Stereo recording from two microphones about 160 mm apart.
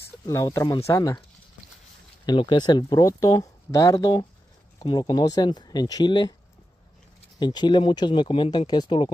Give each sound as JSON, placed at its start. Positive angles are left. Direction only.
{"t": 0.3, "sound": "speech", "side_deg": 15}
{"t": 2.2, "sound": "speech", "side_deg": 30}
{"t": 7.3, "sound": "speech", "side_deg": 25}